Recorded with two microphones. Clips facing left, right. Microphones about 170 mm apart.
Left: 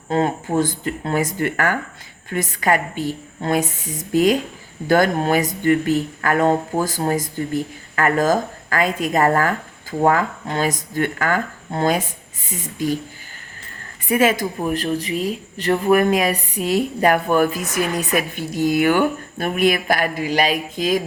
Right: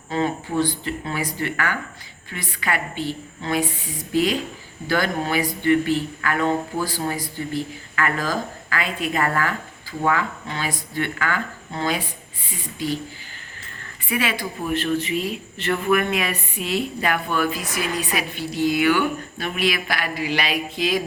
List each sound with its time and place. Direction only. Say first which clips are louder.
0.1 s speech: left 4 dB; 50° left (ahead or behind)
14.1 s speech: left 8 dB; 45° left (ahead or behind)